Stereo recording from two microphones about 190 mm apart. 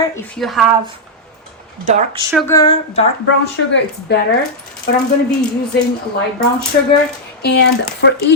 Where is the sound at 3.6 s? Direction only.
90° left.